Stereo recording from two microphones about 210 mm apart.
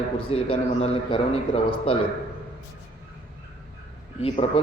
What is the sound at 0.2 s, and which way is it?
A man's voice, 25° left (ahead or behind).